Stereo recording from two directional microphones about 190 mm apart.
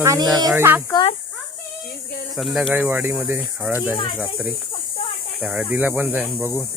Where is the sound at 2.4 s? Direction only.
Centre (ahead or behind).